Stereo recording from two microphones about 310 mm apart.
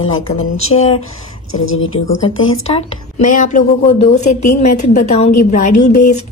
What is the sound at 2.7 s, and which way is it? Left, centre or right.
Speech, left.